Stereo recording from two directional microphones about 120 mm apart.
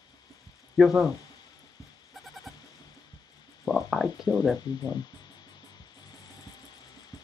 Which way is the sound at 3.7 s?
5° right (ahead or behind).